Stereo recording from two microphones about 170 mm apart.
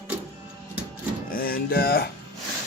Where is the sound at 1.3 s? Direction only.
60° left (ahead or behind).